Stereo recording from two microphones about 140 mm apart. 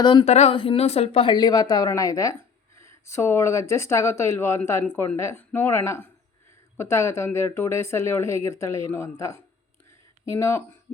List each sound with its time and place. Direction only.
0.0 s speech: 30° left (ahead or behind)
0.3 s speech: 50° left (ahead or behind); by 10.8 s 20° left (ahead or behind)